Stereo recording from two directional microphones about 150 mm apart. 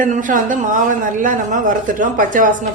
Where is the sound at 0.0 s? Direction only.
60° right (ahead or behind).